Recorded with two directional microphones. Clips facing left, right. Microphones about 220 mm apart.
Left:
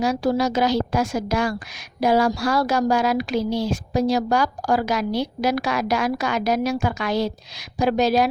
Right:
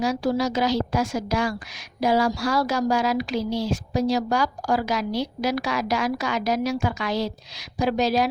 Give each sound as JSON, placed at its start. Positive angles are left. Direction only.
{"t": 0.0, "sound": "a woman's voice", "side_deg": 55}